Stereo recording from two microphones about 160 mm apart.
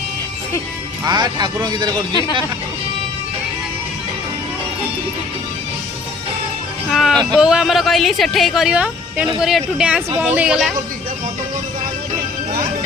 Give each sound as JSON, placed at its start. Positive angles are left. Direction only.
{"t": 1.0, "sound": "speech", "side_deg": -25}
{"t": 6.9, "sound": "a woman's voice", "side_deg": 0}